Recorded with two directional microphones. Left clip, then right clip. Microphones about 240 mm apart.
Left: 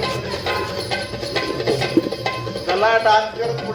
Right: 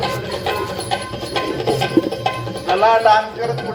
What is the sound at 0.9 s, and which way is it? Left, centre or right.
Music, right.